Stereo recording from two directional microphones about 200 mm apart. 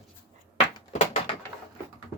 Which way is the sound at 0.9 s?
35° left (ahead or behind).